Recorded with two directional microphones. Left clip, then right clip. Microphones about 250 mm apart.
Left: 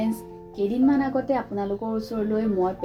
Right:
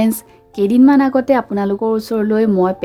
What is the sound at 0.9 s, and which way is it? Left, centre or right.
Speech, right.